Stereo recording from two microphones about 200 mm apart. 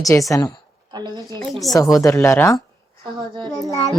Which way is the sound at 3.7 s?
15° left (ahead or behind).